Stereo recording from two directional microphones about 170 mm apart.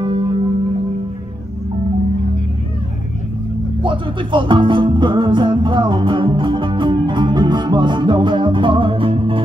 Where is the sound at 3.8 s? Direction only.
30° right (ahead or behind).